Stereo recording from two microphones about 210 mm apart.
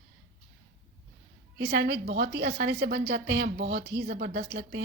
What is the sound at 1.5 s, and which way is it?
A woman's voice, 55° right (ahead or behind).